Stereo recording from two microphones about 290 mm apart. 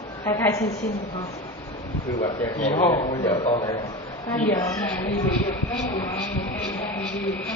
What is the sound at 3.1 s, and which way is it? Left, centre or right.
Speech, centre.